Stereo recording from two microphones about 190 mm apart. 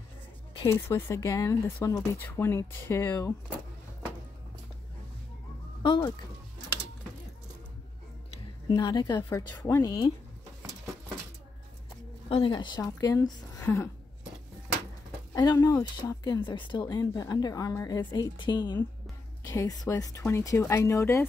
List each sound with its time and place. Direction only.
0.7 s speech: 15° left (ahead or behind)
5.8 s speech: 25° left (ahead or behind)
8.6 s a woman's voice: 20° left (ahead or behind)
12.3 s a woman's voice: 25° left (ahead or behind)
15.3 s a woman's voice: 20° left (ahead or behind)